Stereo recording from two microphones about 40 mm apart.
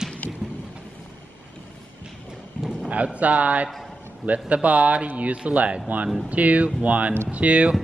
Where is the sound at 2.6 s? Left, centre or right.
Right.